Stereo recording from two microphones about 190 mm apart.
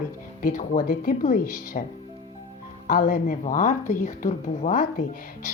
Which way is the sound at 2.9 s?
45° left (ahead or behind).